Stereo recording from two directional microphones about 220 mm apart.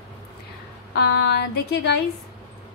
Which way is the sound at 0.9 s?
50° left (ahead or behind).